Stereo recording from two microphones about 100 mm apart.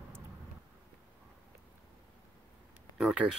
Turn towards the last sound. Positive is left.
turn(degrees=-5)  # may be behind; listen again after turning